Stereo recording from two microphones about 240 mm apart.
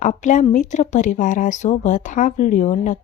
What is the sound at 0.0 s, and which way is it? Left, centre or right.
Speech, left.